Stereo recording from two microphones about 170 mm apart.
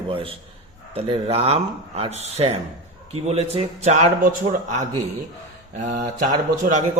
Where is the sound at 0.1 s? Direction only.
30° right (ahead or behind).